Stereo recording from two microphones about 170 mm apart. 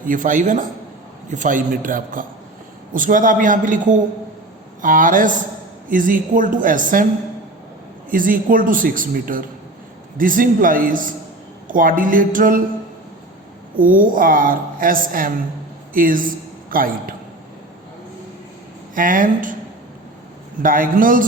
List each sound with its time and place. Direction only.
0.0 s a woman's voice: 50° right (ahead or behind)
8.1 s a woman's voice: 55° right (ahead or behind)
13.7 s a woman's voice: 55° right (ahead or behind)
18.9 s a woman's voice: 55° right (ahead or behind)
20.6 s a woman's voice: 55° right (ahead or behind)